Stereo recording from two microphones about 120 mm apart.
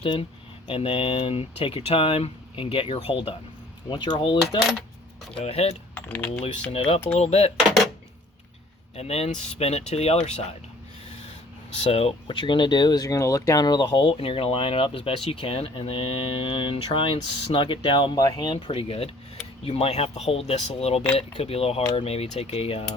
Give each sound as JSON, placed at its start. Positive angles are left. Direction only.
{"t": 0.0, "sound": "speech", "side_deg": 50}
{"t": 3.8, "sound": "coin", "side_deg": 40}
{"t": 5.4, "sound": "speech", "side_deg": 60}
{"t": 6.1, "sound": "speech", "side_deg": 15}
{"t": 6.7, "sound": "speech", "side_deg": 55}
{"t": 7.1, "sound": "speech", "side_deg": 65}
{"t": 9.0, "sound": "speech", "side_deg": 60}
{"t": 11.7, "sound": "speech", "side_deg": 60}
{"t": 18.2, "sound": "coin", "side_deg": 35}
{"t": 18.7, "sound": "speech", "side_deg": 55}